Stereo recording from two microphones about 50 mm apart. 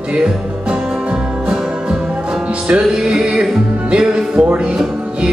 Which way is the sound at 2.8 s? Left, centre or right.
Centre.